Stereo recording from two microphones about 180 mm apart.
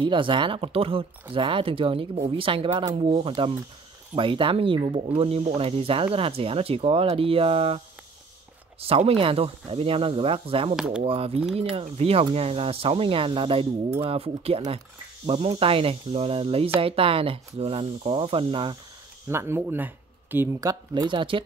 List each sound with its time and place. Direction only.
0.0 s speech: 30° right (ahead or behind)
8.8 s speech: 35° right (ahead or behind)
19.2 s speech: 15° right (ahead or behind)
20.9 s speech: 25° right (ahead or behind)